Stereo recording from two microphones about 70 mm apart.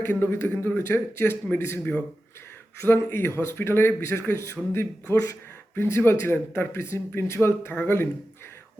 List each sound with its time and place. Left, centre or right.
0.0 s speech: left